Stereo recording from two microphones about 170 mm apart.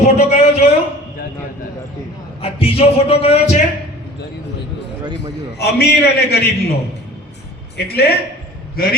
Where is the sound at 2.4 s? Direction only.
35° left (ahead or behind).